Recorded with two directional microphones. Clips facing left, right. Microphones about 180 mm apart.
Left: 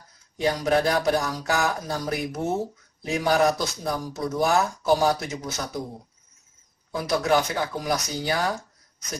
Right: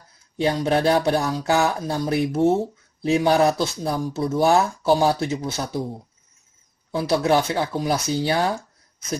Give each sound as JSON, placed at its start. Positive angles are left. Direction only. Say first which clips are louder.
{"t": 0.4, "sound": "speech", "louder": "right 2 dB", "side_deg": -30}
{"t": 6.9, "sound": "speech", "louder": "right 3 dB", "side_deg": -30}